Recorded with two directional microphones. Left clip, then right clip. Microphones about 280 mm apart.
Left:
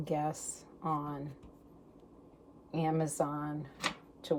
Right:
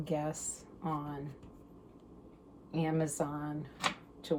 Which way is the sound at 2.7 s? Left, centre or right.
Left.